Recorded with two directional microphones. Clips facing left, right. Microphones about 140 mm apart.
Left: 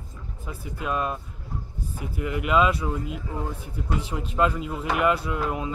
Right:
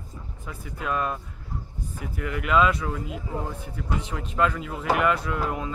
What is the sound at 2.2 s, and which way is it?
Speech, 20° left (ahead or behind).